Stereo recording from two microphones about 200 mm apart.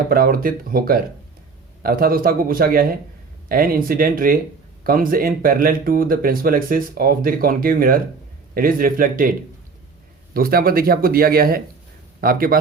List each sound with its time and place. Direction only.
0.1 s speech: 45° right (ahead or behind)
10.3 s speech: 45° right (ahead or behind)